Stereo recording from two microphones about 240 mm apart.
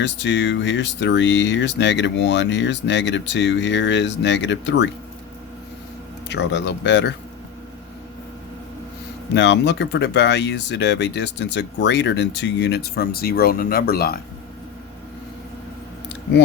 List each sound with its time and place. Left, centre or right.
0.0 s speech: left
6.2 s speech: left
9.3 s speech: left